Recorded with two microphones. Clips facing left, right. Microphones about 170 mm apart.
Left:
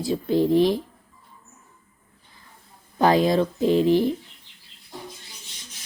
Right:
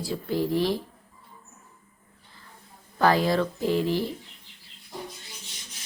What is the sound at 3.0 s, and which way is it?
Speech, 20° left (ahead or behind).